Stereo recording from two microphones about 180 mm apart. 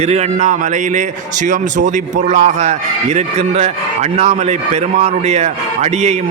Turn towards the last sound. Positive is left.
turn(degrees=-40)  # may be behind; listen again after turning